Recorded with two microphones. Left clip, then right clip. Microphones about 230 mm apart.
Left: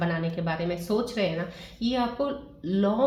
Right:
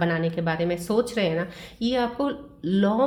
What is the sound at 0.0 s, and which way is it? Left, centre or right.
Speech, right.